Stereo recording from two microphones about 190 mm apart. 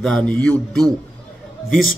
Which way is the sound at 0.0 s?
5° left (ahead or behind).